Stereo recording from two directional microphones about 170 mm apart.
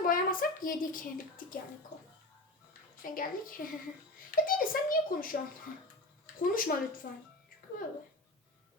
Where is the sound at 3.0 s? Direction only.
55° left (ahead or behind).